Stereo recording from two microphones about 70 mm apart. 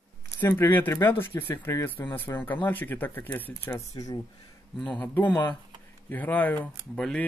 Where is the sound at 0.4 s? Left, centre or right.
Left.